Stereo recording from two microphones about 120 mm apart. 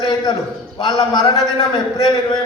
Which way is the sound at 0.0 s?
40° left (ahead or behind).